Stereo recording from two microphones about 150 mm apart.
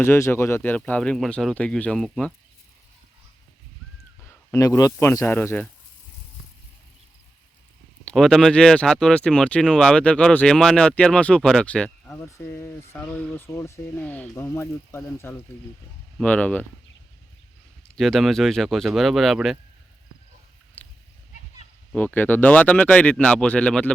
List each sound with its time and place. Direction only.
0.0 s speech: 15° left (ahead or behind)
4.5 s speech: 20° left (ahead or behind)
8.0 s speech: 5° left (ahead or behind)
12.2 s speech: 20° left (ahead or behind)
17.9 s speech: centre (ahead or behind)
20.8 s a sound: 10° left (ahead or behind)
21.9 s speech: 10° left (ahead or behind)